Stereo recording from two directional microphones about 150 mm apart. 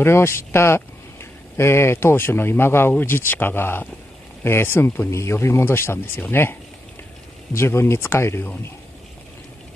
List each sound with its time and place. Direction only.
0.0 s speech: 15° left (ahead or behind)
7.5 s speech: 15° left (ahead or behind)